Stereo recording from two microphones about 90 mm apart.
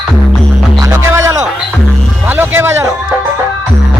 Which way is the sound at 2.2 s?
20° right (ahead or behind).